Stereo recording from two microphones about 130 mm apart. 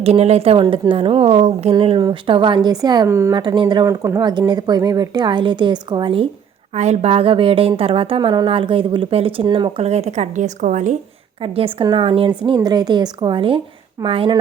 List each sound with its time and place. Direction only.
0.0 s a woman's voice: 55° right (ahead or behind)
1.7 s speech: 35° right (ahead or behind)
3.1 s speech: 20° right (ahead or behind)
3.3 s speech: 35° right (ahead or behind)
3.8 s speech: 25° right (ahead or behind)
6.7 s a woman's voice: 60° right (ahead or behind)
11.4 s a woman's voice: 45° right (ahead or behind)
12.5 s speech: 30° right (ahead or behind)